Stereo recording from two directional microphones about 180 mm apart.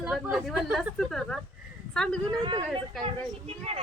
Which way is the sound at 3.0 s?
35° right (ahead or behind).